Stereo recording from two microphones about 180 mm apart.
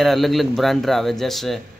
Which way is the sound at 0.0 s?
Centre (ahead or behind).